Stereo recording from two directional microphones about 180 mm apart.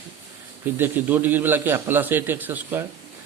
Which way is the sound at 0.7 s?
10° right (ahead or behind).